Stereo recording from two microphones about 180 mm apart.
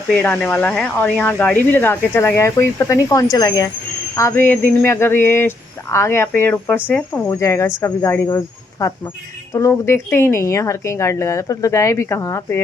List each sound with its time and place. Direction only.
0.1 s speech: 10° left (ahead or behind)